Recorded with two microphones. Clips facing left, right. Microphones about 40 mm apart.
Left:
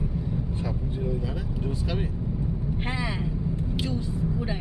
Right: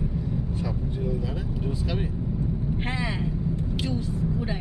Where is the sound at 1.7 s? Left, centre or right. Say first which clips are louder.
Right 1 dB; centre.